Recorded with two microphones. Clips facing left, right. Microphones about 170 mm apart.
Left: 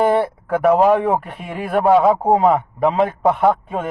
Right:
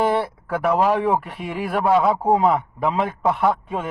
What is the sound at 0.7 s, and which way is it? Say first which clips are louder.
A man's voice: left 4 dB; 45° left (ahead or behind).